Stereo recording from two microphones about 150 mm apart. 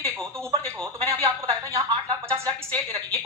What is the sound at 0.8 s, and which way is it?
A woman's voice, 20° right (ahead or behind).